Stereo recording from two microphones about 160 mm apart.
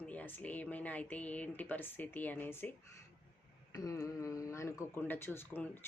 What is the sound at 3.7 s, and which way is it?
Speech, 20° left (ahead or behind).